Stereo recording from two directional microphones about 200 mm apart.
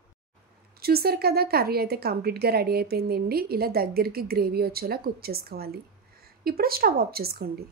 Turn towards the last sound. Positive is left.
turn(degrees=-50)  # may be behind; listen again after turning